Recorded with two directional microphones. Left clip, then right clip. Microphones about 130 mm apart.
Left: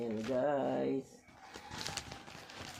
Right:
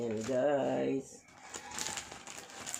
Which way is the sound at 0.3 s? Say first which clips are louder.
Right 3 dB; 15° right (ahead or behind).